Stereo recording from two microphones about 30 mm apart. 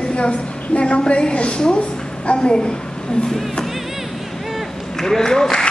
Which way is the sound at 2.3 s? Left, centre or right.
Left.